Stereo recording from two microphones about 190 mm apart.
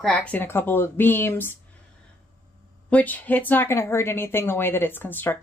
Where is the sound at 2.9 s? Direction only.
10° left (ahead or behind).